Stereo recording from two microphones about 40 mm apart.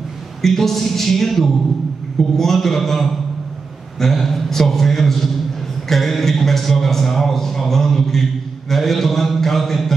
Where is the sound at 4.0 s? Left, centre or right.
Centre.